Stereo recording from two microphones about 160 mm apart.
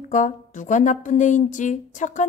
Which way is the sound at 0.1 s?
50° left (ahead or behind).